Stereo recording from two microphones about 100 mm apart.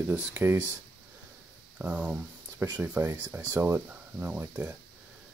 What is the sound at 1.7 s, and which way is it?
Speech, 15° right (ahead or behind).